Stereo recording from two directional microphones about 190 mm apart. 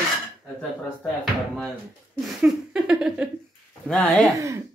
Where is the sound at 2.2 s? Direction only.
5° right (ahead or behind).